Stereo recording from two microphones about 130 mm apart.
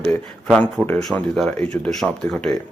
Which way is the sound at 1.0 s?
5° left (ahead or behind).